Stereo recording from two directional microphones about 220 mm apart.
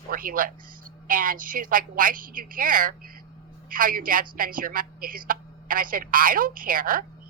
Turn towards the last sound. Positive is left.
turn(degrees=-40)  # may be behind; listen again after turning